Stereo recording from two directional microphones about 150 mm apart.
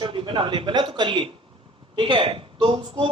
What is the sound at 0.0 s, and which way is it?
Speech, 35° right (ahead or behind).